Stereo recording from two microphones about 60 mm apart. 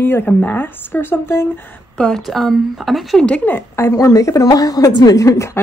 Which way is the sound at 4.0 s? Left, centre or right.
Left.